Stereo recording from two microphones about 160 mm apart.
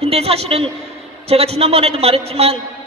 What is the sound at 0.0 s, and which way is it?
A man's voice, 40° right (ahead or behind).